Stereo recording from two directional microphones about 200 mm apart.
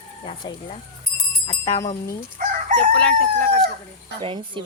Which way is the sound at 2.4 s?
35° right (ahead or behind).